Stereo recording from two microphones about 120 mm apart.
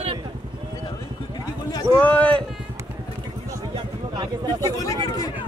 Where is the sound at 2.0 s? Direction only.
10° left (ahead or behind).